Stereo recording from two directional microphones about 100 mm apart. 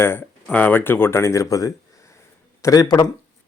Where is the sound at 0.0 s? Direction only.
25° left (ahead or behind).